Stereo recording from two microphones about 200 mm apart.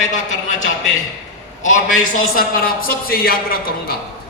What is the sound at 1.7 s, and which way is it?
A man's voice, 45° left (ahead or behind).